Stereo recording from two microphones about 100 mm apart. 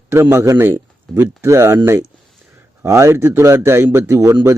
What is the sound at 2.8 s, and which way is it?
A man's voice, 30° right (ahead or behind).